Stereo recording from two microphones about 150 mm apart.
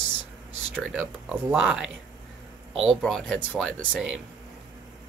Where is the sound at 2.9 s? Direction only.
5° left (ahead or behind).